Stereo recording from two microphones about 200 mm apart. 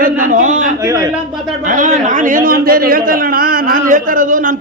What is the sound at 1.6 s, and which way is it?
A man's voice, 40° right (ahead or behind).